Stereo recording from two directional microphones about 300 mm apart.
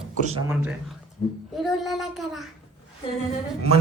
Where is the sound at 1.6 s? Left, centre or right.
Centre.